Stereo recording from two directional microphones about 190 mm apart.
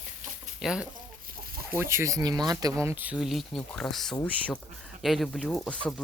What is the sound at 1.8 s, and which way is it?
Speech, 15° right (ahead or behind).